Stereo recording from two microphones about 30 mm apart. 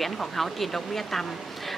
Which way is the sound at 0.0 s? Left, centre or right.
Centre.